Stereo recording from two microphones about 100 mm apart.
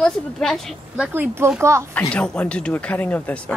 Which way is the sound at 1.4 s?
25° right (ahead or behind).